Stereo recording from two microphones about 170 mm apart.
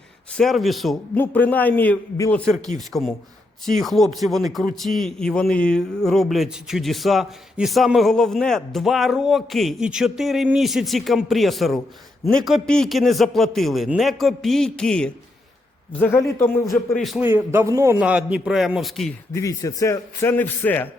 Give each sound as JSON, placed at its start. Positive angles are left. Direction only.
{"t": 0.3, "sound": "a man's voice", "side_deg": 0}
{"t": 1.1, "sound": "speech", "side_deg": 10}
{"t": 2.7, "sound": "a man's voice", "side_deg": 0}
{"t": 16.9, "sound": "a man's voice", "side_deg": 0}
{"t": 17.2, "sound": "a man's voice", "side_deg": -15}
{"t": 18.0, "sound": "a man's voice", "side_deg": -5}
{"t": 19.3, "sound": "speech", "side_deg": 20}